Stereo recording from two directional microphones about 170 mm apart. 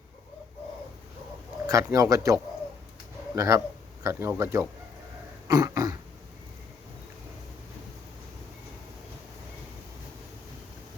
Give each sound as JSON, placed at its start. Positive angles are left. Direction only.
{"t": 1.6, "sound": "speech", "side_deg": -20}
{"t": 5.5, "sound": "cough", "side_deg": -20}